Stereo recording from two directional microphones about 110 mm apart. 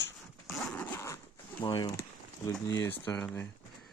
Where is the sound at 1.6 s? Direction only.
45° left (ahead or behind).